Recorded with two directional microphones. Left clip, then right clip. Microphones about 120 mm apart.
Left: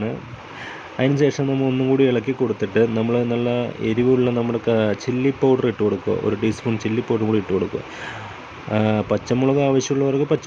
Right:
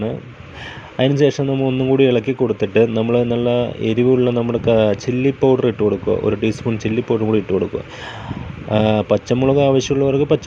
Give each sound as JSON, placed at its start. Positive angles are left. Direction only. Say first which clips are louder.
{"t": 0.9, "sound": "speech", "louder": "right 4 dB", "side_deg": -25}
{"t": 1.5, "sound": "speech", "louder": "right 2 dB", "side_deg": -10}
{"t": 2.0, "sound": "speech", "louder": "right 4 dB", "side_deg": -25}
{"t": 4.1, "sound": "speech", "louder": "right 3 dB", "side_deg": -15}
{"t": 8.7, "sound": "speech", "louder": "right 5 dB", "side_deg": -30}